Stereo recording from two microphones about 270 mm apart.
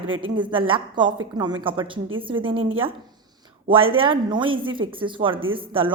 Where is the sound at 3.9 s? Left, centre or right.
Centre.